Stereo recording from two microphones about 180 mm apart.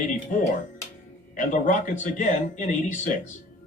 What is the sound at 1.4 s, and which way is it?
Speech, 45° left (ahead or behind).